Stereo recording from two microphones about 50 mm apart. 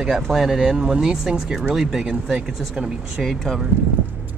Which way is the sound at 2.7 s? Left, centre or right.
Right.